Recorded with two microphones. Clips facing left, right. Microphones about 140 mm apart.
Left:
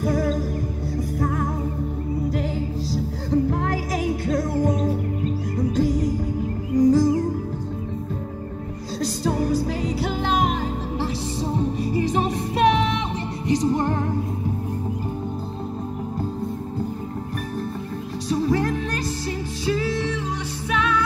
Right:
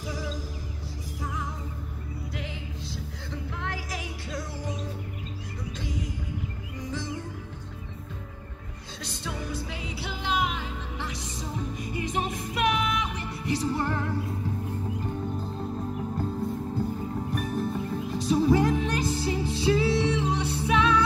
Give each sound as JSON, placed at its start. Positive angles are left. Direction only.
{"t": 0.0, "sound": "music", "side_deg": 55}
{"t": 2.9, "sound": "music", "side_deg": 40}
{"t": 9.0, "sound": "music", "side_deg": 40}
{"t": 13.5, "sound": "music", "side_deg": 15}
{"t": 18.3, "sound": "music", "side_deg": -10}